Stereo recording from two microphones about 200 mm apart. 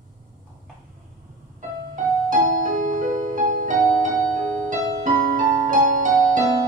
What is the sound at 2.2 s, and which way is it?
Music, 40° right (ahead or behind).